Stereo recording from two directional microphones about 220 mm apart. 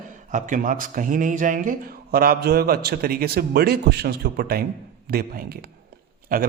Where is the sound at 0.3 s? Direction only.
35° right (ahead or behind).